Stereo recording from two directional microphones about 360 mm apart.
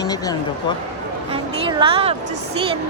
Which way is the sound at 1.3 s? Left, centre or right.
Centre.